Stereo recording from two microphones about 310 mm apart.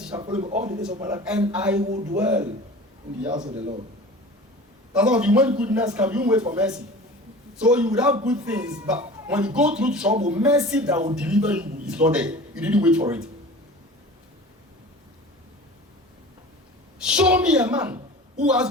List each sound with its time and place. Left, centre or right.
0.4 s speech: right
1.0 s a man's voice: centre
1.8 s speech: right
2.1 s a man's voice: centre
4.9 s a man's voice: centre
17.0 s a woman's voice: centre